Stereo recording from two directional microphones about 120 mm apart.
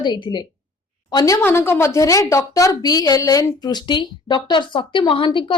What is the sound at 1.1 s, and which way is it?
Speech, 30° left (ahead or behind).